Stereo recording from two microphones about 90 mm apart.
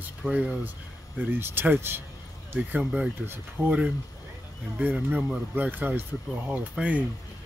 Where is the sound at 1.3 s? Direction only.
25° right (ahead or behind).